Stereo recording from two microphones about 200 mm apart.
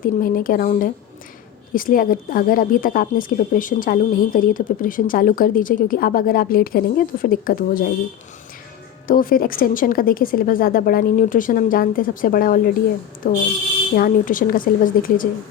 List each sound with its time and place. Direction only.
0.0 s speech: 45° left (ahead or behind)
9.0 s speech: 45° left (ahead or behind)